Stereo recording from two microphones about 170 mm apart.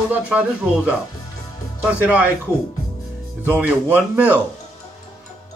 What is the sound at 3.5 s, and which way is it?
Speech, 10° right (ahead or behind).